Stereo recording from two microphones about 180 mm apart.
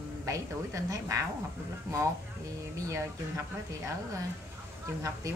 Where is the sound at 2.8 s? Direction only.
15° right (ahead or behind).